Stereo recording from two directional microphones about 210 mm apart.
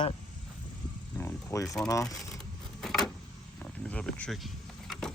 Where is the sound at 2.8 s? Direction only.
Centre (ahead or behind).